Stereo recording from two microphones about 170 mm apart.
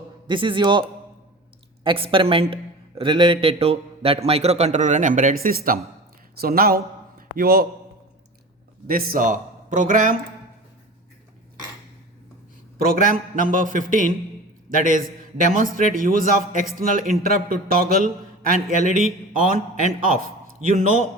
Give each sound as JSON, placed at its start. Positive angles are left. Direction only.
{"t": 0.3, "sound": "a man's voice", "side_deg": -30}
{"t": 8.9, "sound": "a man's voice", "side_deg": -60}
{"t": 12.8, "sound": "a man's voice", "side_deg": -55}